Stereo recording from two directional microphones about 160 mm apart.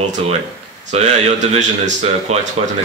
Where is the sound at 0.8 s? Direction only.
45° right (ahead or behind).